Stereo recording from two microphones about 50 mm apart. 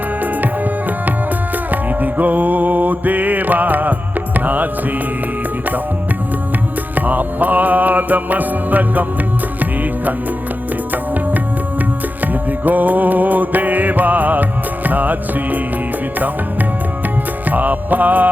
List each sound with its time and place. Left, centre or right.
0.2 s music: right
6.9 s music: right
10.9 s music: right